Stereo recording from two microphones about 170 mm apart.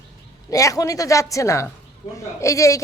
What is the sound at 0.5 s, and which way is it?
A woman's voice, 20° left (ahead or behind).